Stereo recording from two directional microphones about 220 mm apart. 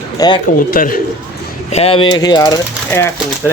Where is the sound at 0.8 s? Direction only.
40° left (ahead or behind).